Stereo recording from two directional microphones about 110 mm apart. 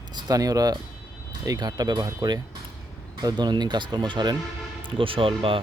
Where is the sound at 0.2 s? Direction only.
35° right (ahead or behind).